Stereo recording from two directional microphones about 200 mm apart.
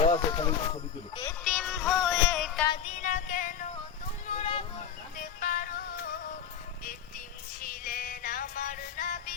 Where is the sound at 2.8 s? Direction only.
35° left (ahead or behind).